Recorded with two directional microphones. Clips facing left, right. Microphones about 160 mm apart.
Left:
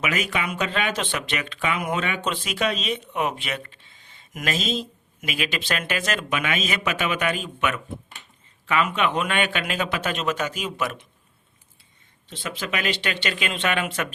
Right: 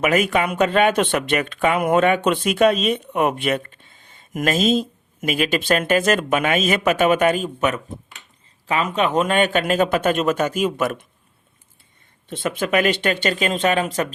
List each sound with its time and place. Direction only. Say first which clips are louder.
0.0 s speech: right 8 dB; 50° right (ahead or behind)
12.3 s speech: right 9 dB; 50° right (ahead or behind)